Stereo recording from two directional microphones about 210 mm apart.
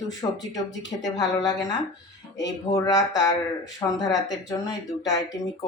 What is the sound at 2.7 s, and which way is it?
Speech, 20° left (ahead or behind).